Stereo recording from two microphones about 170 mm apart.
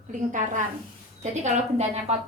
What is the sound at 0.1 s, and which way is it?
A woman's voice, 50° right (ahead or behind).